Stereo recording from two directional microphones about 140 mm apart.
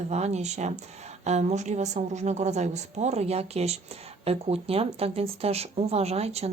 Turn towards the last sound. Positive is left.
turn(degrees=-50)  # may be behind; listen again after turning